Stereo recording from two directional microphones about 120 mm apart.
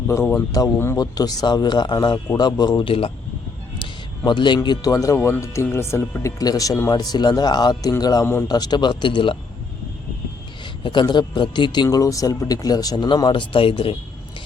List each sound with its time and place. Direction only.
0.1 s speech: 25° left (ahead or behind); by 3.1 s 50° left (ahead or behind)
4.3 s speech: 40° left (ahead or behind)
8.2 s a man's voice: 20° left (ahead or behind)
8.4 s speech: 35° left (ahead or behind)
10.8 s speech: 40° left (ahead or behind)